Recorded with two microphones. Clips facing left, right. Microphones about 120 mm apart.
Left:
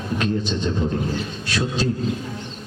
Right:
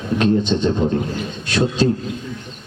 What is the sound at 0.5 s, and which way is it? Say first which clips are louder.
Speech: right 7 dB; 40° right (ahead or behind).